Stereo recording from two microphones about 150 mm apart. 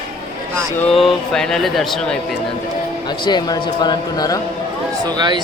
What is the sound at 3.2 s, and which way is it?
Speech, 30° left (ahead or behind).